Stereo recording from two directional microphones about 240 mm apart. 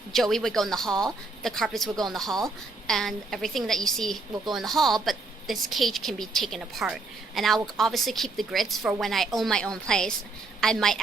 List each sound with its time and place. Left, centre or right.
0.1 s a woman's voice: centre